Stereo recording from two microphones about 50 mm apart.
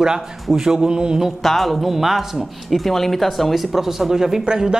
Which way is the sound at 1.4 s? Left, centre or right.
Centre.